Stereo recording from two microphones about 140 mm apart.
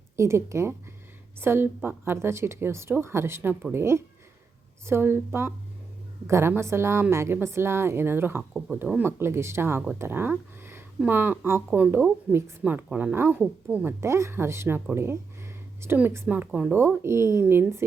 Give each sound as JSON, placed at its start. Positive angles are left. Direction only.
{"t": 0.2, "sound": "a woman's voice", "side_deg": -20}
{"t": 8.5, "sound": "speech", "side_deg": -5}
{"t": 9.0, "sound": "a woman's voice", "side_deg": -15}